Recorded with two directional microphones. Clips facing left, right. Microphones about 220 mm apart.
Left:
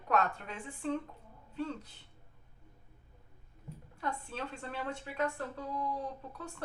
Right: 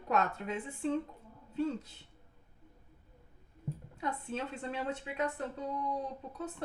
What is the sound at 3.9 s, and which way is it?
Speech, 20° right (ahead or behind).